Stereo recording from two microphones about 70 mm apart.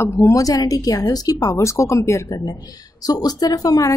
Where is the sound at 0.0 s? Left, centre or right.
Left.